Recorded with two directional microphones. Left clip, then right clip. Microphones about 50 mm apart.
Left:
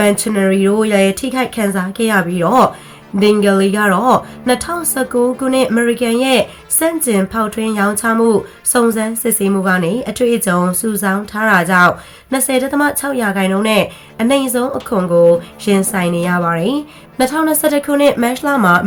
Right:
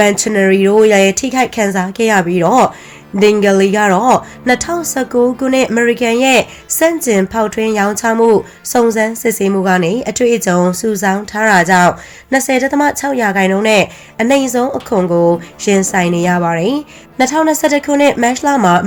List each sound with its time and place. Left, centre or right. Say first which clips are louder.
0.0 s speech: right 3 dB; right
3.4 s speech: right 3 dB; right
6.7 s a woman's voice: right 4 dB; right
14.3 s speech: right 2 dB; right
15.9 s a woman's voice: right 3 dB; right